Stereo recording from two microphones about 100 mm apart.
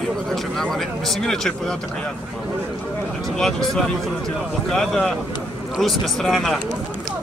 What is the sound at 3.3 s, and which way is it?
Speech, 5° left (ahead or behind).